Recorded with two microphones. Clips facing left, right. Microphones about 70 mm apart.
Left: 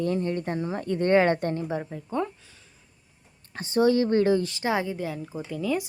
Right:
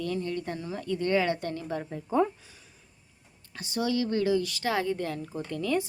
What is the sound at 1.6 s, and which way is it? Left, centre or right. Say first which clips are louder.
Speech: left 3 dB; centre.